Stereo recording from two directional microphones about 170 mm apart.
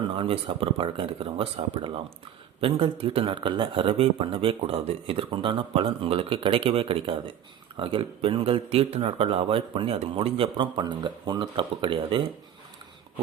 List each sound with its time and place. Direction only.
0.2 s speech: 30° right (ahead or behind)